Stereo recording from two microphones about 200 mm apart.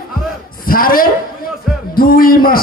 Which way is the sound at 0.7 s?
45° left (ahead or behind).